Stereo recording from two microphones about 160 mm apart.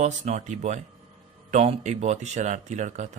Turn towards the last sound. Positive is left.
turn(degrees=-50)  # may be behind; listen again after turning